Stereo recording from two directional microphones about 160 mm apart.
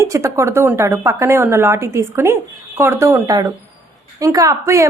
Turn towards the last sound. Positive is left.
turn(degrees=-20)  # may be behind; listen again after turning